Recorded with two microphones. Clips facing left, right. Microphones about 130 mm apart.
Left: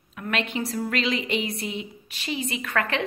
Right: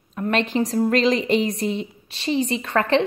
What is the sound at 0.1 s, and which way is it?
A woman's voice, 35° right (ahead or behind).